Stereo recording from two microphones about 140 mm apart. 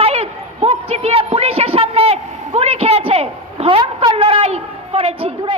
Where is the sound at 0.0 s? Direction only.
45° right (ahead or behind).